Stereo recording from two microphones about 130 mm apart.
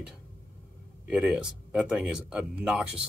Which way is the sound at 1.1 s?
5° right (ahead or behind).